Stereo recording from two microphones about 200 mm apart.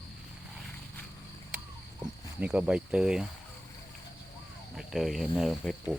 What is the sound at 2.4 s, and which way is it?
Speech, 5° right (ahead or behind).